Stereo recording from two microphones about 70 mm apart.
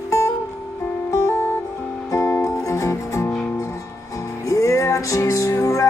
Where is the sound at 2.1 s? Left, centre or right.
Left.